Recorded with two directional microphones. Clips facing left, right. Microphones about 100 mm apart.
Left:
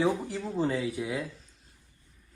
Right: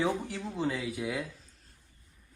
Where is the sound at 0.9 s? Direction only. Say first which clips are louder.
Left 1 dB; centre (ahead or behind).